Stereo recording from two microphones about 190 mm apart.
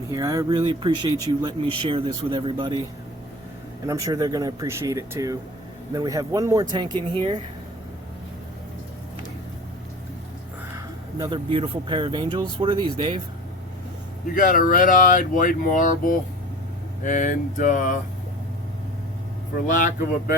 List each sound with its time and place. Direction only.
0.1 s speech: 20° right (ahead or behind)
3.8 s speech: 15° right (ahead or behind)
11.2 s speech: 25° right (ahead or behind)
14.3 s speech: 45° left (ahead or behind)
19.5 s speech: 45° left (ahead or behind)